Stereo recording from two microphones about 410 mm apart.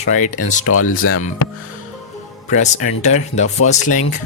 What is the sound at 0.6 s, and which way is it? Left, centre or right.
Speech, left.